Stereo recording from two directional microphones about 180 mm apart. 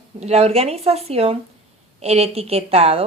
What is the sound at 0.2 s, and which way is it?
A woman's voice, 35° right (ahead or behind).